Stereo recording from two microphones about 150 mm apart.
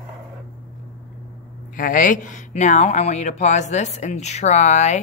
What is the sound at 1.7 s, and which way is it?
Speech, 65° left (ahead or behind).